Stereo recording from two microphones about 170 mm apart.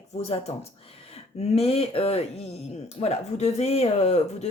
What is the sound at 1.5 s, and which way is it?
Speech, 35° left (ahead or behind).